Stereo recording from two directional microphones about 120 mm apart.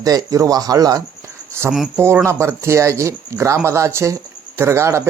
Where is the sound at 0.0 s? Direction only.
30° right (ahead or behind).